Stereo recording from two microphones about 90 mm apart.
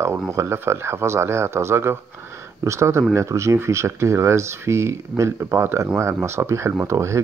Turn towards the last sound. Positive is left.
turn(degrees=-35)  # may be behind; listen again after turning